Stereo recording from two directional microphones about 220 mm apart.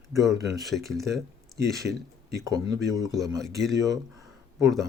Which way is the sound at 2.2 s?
15° right (ahead or behind).